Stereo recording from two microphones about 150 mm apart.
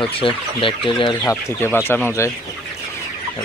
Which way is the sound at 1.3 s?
15° left (ahead or behind).